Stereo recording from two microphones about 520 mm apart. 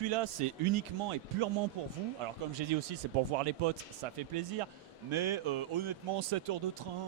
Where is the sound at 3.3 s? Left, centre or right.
Right.